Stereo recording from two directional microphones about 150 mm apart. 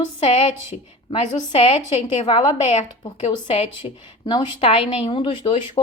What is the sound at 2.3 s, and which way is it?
A woman's voice, 30° left (ahead or behind).